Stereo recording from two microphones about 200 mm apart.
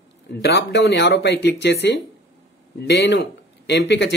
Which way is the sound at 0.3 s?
55° left (ahead or behind).